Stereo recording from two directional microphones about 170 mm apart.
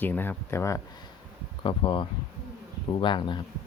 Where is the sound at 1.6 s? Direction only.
30° left (ahead or behind).